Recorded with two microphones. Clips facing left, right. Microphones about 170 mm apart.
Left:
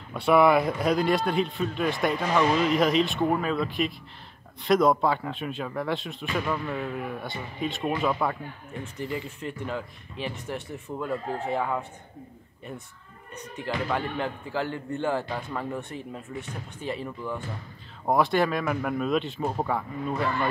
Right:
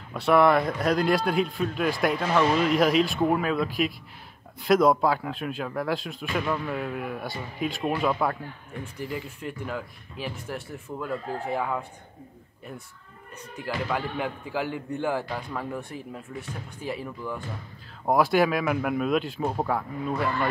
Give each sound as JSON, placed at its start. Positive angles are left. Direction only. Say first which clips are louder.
{"t": 0.1, "sound": "speech", "louder": "even", "side_deg": 0}
{"t": 13.6, "sound": "a man's voice", "louder": "left 1 dB", "side_deg": -5}